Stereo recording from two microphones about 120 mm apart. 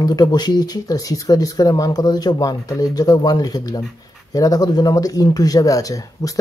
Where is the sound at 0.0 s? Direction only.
35° left (ahead or behind).